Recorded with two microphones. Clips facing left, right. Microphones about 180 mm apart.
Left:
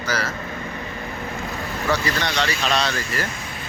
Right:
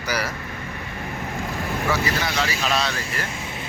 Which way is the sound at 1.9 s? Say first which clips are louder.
Left 2 dB; 5° right (ahead or behind).